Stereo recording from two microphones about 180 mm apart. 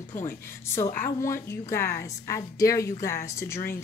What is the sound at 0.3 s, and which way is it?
A woman's voice, 15° left (ahead or behind).